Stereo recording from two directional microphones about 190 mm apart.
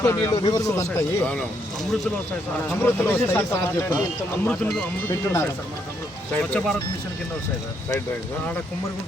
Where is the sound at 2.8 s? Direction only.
10° left (ahead or behind).